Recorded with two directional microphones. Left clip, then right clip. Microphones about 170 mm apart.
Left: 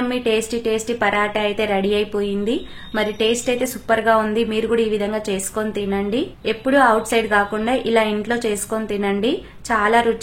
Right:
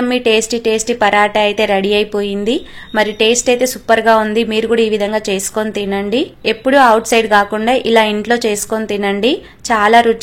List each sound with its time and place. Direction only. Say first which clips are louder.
0.1 s a woman's voice: right 9 dB; 35° right (ahead or behind)